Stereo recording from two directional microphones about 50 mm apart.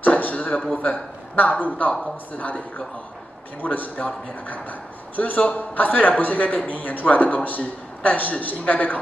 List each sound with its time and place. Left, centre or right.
0.0 s a sound: left
0.7 s speech: left
3.6 s a man's voice: left